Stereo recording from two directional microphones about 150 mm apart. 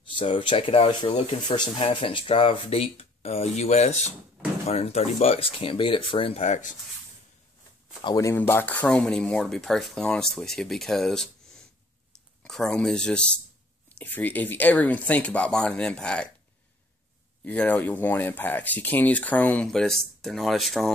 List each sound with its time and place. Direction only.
0.1 s speech: 35° left (ahead or behind); by 6.8 s 55° left (ahead or behind)
8.0 s speech: 25° left (ahead or behind); by 11.2 s 5° left (ahead or behind)
12.4 s speech: 5° left (ahead or behind)
17.5 s speech: 10° left (ahead or behind)